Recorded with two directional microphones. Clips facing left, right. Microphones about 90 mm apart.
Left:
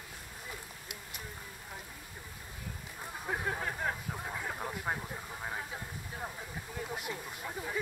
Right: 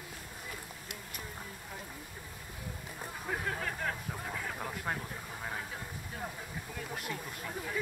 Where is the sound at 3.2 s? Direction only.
15° left (ahead or behind).